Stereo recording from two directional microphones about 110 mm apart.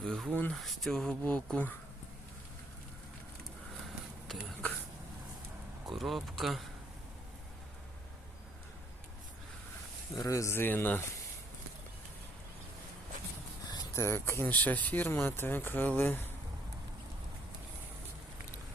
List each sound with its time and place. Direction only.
0.0 s speech: 5° left (ahead or behind)
5.9 s speech: centre (ahead or behind)
10.2 s speech: 30° left (ahead or behind)
13.7 s speech: 25° left (ahead or behind)